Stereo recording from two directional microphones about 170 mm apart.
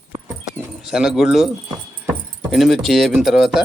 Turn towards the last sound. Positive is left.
turn(degrees=0)  # may be behind; listen again after turning